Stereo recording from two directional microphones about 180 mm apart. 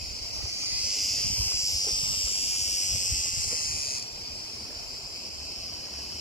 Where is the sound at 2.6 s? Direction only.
45° left (ahead or behind).